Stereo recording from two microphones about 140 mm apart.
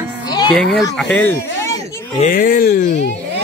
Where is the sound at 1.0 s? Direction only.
10° left (ahead or behind).